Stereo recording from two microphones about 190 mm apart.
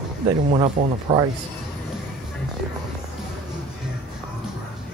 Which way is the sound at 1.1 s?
20° right (ahead or behind).